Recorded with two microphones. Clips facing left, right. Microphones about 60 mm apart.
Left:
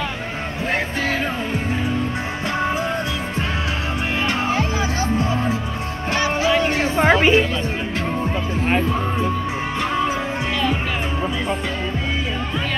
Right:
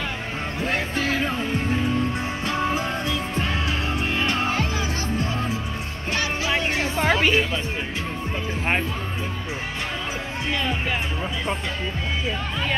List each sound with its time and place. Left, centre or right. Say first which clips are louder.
0.7 s music: left 3 dB; left
4.3 s music: left 3 dB; left
6.8 s a sound: left 4 dB; left